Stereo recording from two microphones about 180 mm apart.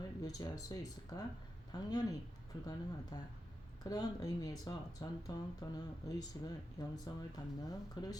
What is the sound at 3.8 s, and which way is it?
A woman's voice, 20° left (ahead or behind).